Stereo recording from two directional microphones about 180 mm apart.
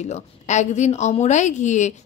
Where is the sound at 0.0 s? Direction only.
40° left (ahead or behind).